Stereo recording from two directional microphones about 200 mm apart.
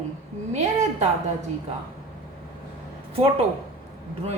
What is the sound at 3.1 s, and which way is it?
Speech, 30° right (ahead or behind).